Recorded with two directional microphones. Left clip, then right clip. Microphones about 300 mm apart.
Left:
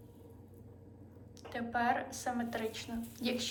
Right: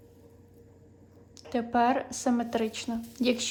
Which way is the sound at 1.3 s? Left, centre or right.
Centre.